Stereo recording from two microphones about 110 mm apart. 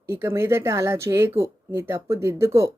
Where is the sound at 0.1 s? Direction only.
20° right (ahead or behind).